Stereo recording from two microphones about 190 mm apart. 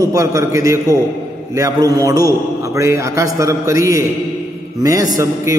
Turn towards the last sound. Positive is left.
turn(degrees=-15)  # may be behind; listen again after turning